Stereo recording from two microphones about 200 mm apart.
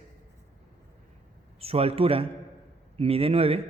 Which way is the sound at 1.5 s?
30° right (ahead or behind).